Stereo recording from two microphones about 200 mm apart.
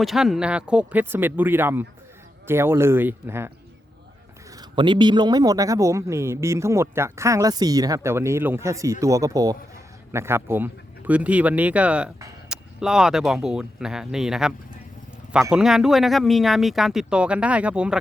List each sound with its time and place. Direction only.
0.0 s speech: centre (ahead or behind)
4.5 s speech: 25° right (ahead or behind); by 18.0 s 5° right (ahead or behind)